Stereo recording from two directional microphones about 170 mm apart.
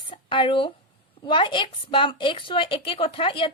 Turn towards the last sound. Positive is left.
turn(degrees=30)  # may be behind; listen again after turning